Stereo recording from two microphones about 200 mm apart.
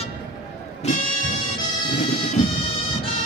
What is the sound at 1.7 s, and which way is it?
Bagpipes, 25° left (ahead or behind).